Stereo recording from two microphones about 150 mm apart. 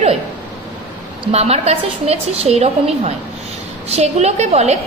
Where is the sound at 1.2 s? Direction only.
45° right (ahead or behind).